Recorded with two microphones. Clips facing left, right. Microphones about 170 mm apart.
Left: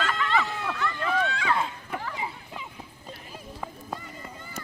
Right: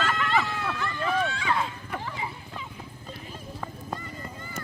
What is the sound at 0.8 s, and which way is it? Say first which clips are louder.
Run: left 1 dB; 30° right (ahead or behind).